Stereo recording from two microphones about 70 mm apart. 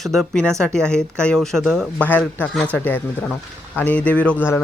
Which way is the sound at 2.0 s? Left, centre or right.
Left.